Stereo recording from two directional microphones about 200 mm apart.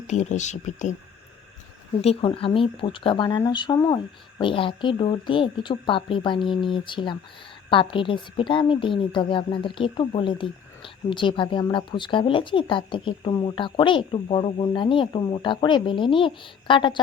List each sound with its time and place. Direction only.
0.1 s speech: 35° left (ahead or behind)
2.0 s a woman's voice: 30° left (ahead or behind)